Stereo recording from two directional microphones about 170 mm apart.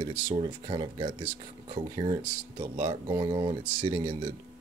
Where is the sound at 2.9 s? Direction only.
20° right (ahead or behind).